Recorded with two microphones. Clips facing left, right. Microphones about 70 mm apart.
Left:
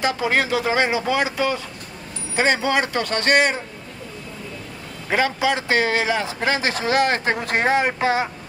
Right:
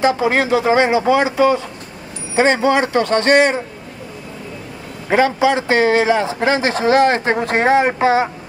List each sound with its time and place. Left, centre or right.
0.0 s a man's voice: right
5.1 s a man's voice: right